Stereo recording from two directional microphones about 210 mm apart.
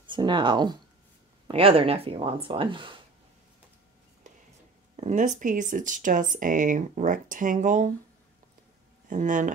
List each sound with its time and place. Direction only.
0.0 s speech: 20° right (ahead or behind)
4.9 s speech: 35° right (ahead or behind)
9.1 s speech: 35° right (ahead or behind)